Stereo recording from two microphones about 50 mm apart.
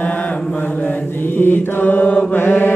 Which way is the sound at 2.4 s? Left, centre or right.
Left.